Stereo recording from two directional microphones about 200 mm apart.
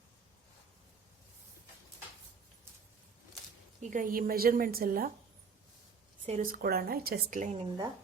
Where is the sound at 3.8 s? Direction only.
40° right (ahead or behind).